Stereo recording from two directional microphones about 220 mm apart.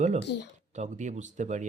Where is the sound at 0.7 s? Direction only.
35° right (ahead or behind).